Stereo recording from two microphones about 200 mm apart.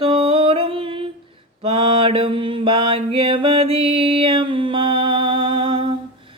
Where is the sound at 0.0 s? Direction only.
25° right (ahead or behind).